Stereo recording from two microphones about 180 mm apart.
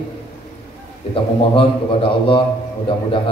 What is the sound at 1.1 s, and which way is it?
A man's voice, 30° left (ahead or behind).